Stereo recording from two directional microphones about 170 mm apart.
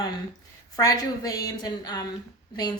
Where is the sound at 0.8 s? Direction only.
20° left (ahead or behind).